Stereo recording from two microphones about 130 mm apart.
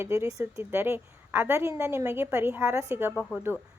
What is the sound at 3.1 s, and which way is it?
Speech, 10° left (ahead or behind).